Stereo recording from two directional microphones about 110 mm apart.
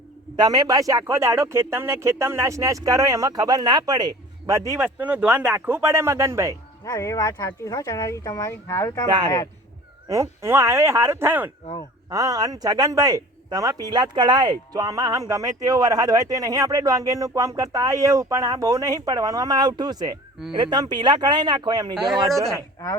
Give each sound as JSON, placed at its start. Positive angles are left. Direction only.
{"t": 0.3, "sound": "speech", "side_deg": -35}
{"t": 4.8, "sound": "speech", "side_deg": -15}
{"t": 6.8, "sound": "speech", "side_deg": 30}
{"t": 9.0, "sound": "speech", "side_deg": -40}
{"t": 10.1, "sound": "speech", "side_deg": -25}
{"t": 12.0, "sound": "speech", "side_deg": -35}